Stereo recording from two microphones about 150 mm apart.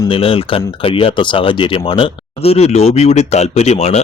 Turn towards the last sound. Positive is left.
turn(degrees=45)  # may be behind; listen again after turning